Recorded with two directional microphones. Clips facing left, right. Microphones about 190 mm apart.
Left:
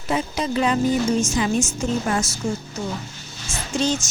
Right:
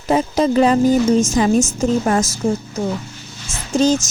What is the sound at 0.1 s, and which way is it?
A woman's voice, 45° right (ahead or behind).